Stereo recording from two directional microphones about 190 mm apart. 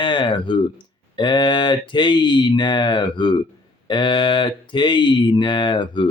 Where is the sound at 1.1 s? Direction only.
25° left (ahead or behind).